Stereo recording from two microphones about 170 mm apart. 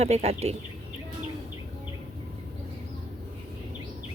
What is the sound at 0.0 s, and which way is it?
Speech, 40° right (ahead or behind).